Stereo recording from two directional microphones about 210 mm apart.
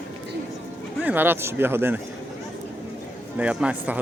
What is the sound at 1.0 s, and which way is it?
Speech, 10° right (ahead or behind).